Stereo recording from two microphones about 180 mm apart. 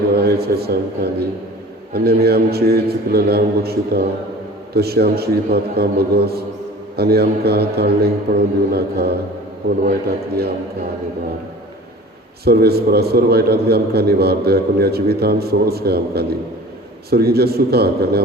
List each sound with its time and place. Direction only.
0.2 s a man's voice: 60° right (ahead or behind)
12.5 s a man's voice: 60° right (ahead or behind)